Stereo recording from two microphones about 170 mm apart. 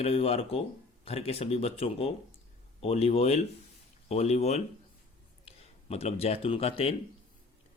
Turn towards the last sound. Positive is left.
turn(degrees=35)  # may be behind; listen again after turning